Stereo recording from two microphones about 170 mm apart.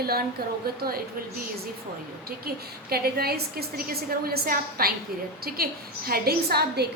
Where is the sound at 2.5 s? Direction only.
60° right (ahead or behind).